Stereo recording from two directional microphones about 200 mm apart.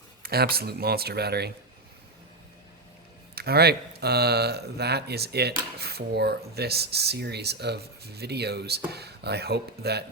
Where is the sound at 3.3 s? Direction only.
50° right (ahead or behind).